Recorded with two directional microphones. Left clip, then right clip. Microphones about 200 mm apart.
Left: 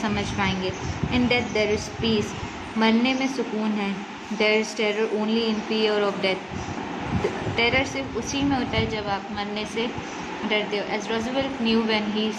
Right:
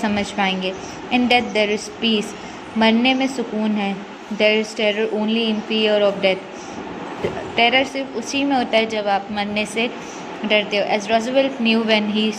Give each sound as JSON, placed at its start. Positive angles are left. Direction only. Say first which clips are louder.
{"t": 0.0, "sound": "a woman's voice", "louder": "right 5 dB", "side_deg": -30}
{"t": 7.5, "sound": "a woman's voice", "louder": "right 7 dB", "side_deg": -25}